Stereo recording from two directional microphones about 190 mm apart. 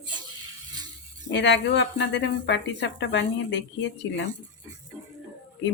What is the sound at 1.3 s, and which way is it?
Speech, 70° left (ahead or behind).